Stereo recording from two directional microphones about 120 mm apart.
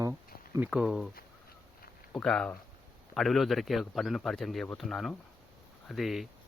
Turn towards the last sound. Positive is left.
turn(degrees=0)  # may be behind; listen again after turning